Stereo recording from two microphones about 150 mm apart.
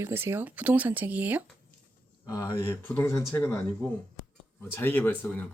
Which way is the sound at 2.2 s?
20° left (ahead or behind).